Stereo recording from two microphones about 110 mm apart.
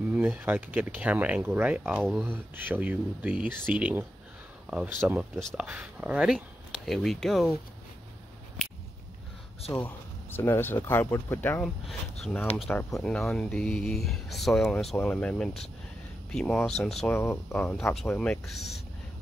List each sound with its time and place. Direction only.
0.1 s speech: 15° right (ahead or behind); by 7.5 s centre (ahead or behind)
9.7 s speech: 20° left (ahead or behind)
12.2 s speech: 5° left (ahead or behind)
17.1 s speech: 20° left (ahead or behind)